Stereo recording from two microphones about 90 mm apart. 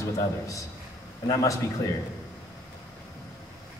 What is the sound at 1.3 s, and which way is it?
Speech, 40° left (ahead or behind).